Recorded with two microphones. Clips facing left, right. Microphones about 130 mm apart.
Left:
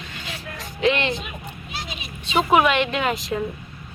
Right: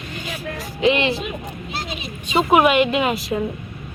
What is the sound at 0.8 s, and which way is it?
Speech, 5° right (ahead or behind).